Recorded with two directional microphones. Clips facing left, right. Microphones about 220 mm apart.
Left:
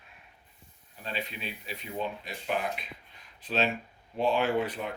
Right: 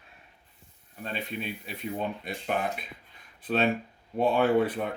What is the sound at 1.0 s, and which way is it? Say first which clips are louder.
Speech: right 3 dB; 50° right (ahead or behind).